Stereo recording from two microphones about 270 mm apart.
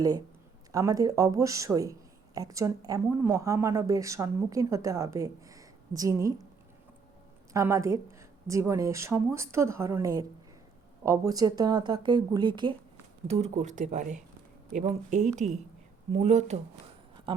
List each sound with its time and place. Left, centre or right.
0.7 s speech: centre
7.5 s speech: centre
17.3 s a sound: centre